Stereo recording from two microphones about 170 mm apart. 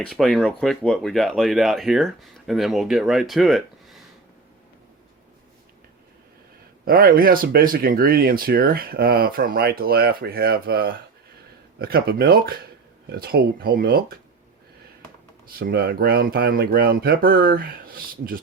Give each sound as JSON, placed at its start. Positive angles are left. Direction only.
{"t": 0.0, "sound": "speech", "side_deg": 0}
{"t": 6.8, "sound": "speech", "side_deg": -60}
{"t": 15.5, "sound": "speech", "side_deg": -65}